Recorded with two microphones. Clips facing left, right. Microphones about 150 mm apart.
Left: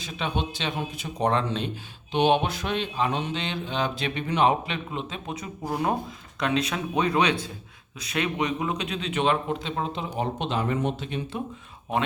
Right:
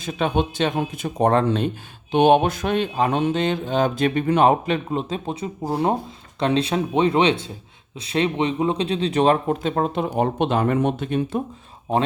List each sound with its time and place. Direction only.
0.0 s speech: 50° right (ahead or behind)